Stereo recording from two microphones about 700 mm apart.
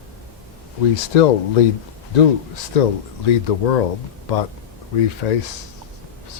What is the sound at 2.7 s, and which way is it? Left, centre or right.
Speech, left.